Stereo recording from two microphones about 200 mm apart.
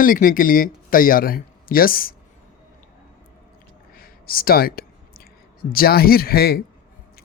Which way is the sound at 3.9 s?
45° left (ahead or behind).